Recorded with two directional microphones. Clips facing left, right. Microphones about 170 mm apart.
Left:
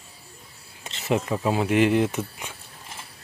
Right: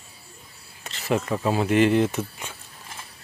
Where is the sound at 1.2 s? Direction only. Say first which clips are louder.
Even; 10° left (ahead or behind).